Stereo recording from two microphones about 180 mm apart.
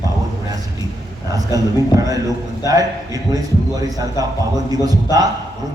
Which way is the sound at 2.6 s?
20° right (ahead or behind).